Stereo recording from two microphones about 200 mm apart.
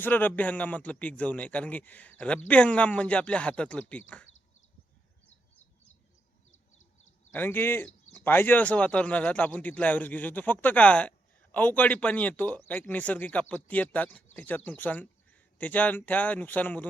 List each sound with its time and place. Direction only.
0.0 s speech: 10° left (ahead or behind)
6.5 s a sound: 90° left
7.3 s speech: 10° left (ahead or behind)